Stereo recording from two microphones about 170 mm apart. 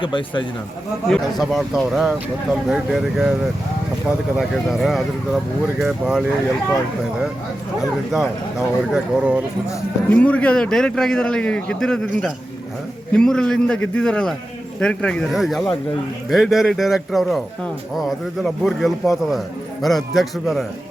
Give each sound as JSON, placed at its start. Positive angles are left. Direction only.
{"t": 0.0, "sound": "speech", "side_deg": 30}
{"t": 1.0, "sound": "speech", "side_deg": 0}
{"t": 4.4, "sound": "speech", "side_deg": 0}
{"t": 7.8, "sound": "speech", "side_deg": 0}
{"t": 9.6, "sound": "speech", "side_deg": 5}
{"t": 13.1, "sound": "speech", "side_deg": 5}